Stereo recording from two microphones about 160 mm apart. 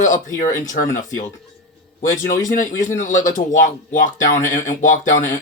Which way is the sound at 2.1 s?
55° left (ahead or behind).